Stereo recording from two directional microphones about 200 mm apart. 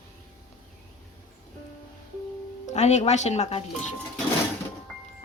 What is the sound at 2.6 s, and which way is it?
Speech, 35° left (ahead or behind).